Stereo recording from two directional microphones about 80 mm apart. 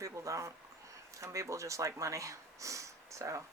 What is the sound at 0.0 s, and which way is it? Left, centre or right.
Speech, right.